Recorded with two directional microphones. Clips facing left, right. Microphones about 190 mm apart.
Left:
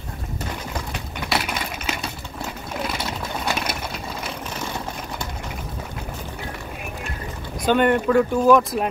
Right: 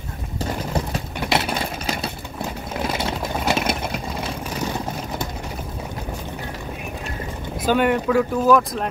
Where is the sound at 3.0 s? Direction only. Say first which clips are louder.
Right 4 dB; 25° right (ahead or behind).